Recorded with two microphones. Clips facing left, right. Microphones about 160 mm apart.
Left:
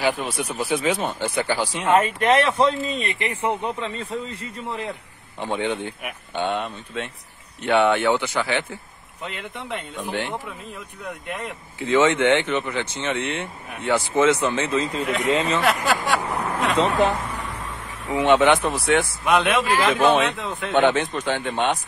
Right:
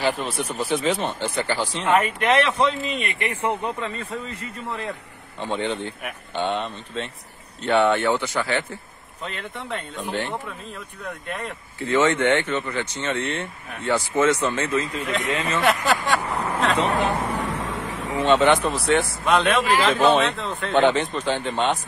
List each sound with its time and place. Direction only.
0.0 s speech: 5° left (ahead or behind)
1.9 s a man's voice: 25° left (ahead or behind)
5.4 s speech: 10° left (ahead or behind)
14.7 s a man's voice: 25° left (ahead or behind)
15.6 s speech: centre (ahead or behind)
16.4 s vehicle: 10° left (ahead or behind)
17.2 s a sound: 75° right (ahead or behind); by 18.1 s 90° right
18.2 s speech: 15° left (ahead or behind)
21.5 s speech: 5° left (ahead or behind)